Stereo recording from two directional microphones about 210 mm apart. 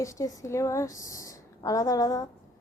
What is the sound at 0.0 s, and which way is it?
A woman's voice, 15° left (ahead or behind).